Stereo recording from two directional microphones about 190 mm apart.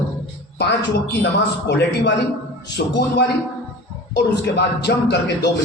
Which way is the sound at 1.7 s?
65° left (ahead or behind).